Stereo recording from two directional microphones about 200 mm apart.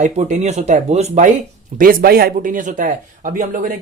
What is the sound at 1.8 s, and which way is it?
Speech, 45° right (ahead or behind).